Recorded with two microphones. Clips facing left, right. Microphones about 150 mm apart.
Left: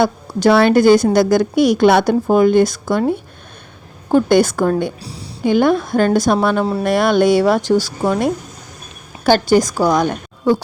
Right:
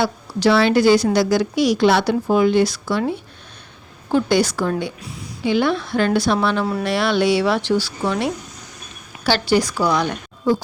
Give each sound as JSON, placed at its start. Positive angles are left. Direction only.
{"t": 0.0, "sound": "a woman's voice", "side_deg": 50}
{"t": 4.1, "sound": "a woman's voice", "side_deg": 50}
{"t": 10.5, "sound": "a woman's voice", "side_deg": 70}